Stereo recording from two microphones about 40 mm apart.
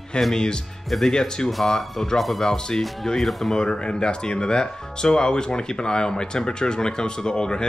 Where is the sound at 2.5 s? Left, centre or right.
Centre.